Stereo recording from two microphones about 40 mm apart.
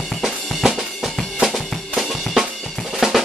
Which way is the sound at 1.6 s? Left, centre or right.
Centre.